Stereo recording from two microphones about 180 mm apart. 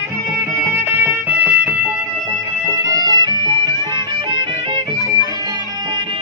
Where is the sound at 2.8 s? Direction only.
20° right (ahead or behind).